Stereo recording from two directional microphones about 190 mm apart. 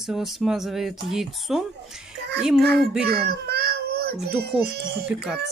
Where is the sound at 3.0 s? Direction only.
55° right (ahead or behind).